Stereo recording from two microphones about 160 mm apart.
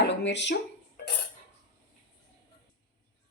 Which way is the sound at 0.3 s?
90° left.